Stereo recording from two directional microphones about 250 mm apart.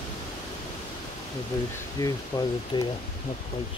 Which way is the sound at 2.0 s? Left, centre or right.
Centre.